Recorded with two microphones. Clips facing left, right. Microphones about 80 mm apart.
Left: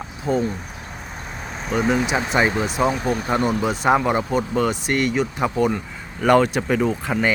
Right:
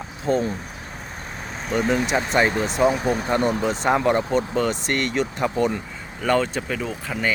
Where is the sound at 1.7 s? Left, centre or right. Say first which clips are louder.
Left 1 dB; centre.